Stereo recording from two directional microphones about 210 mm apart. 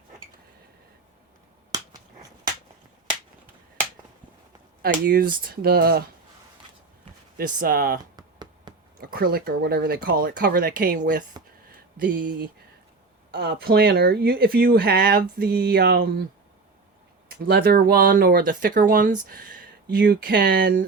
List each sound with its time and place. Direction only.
4.8 s speech: 45° right (ahead or behind)
7.3 s speech: 45° right (ahead or behind)
8.1 s a sound: 20° right (ahead or behind)
9.0 s speech: 45° right (ahead or behind)
13.3 s speech: 50° right (ahead or behind)
17.2 s speech: 45° right (ahead or behind)